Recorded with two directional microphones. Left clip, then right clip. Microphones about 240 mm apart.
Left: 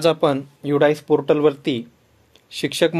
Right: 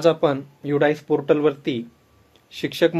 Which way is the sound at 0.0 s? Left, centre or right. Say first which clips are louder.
Left 1 dB; left.